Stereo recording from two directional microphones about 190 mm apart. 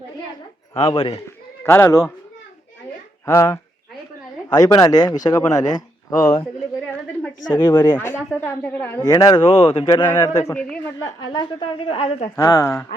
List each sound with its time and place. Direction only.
0.8 s speech: 30° left (ahead or behind)
1.6 s speech: 15° left (ahead or behind)
3.2 s speech: 15° left (ahead or behind)
7.5 s speech: 10° left (ahead or behind)
11.3 s speech: 25° left (ahead or behind)
12.4 s speech: 15° left (ahead or behind)